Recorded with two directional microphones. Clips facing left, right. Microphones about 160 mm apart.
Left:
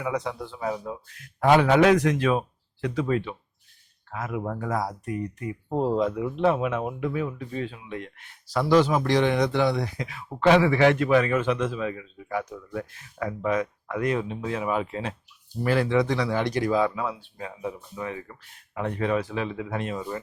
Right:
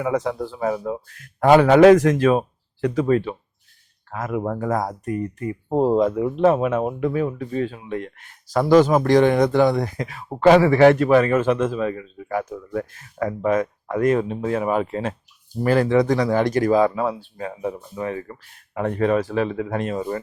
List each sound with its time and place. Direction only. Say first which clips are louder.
0.0 s speech: right 6 dB; 45° right (ahead or behind)